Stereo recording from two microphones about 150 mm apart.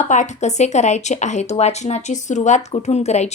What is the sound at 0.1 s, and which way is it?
A woman's voice, 50° left (ahead or behind).